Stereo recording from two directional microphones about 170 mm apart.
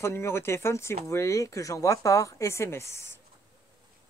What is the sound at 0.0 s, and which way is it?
Speech, 15° left (ahead or behind).